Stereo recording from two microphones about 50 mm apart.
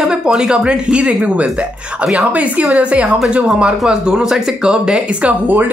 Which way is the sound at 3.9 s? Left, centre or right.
Centre.